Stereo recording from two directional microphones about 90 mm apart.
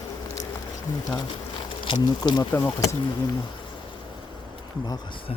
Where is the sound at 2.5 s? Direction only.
30° left (ahead or behind).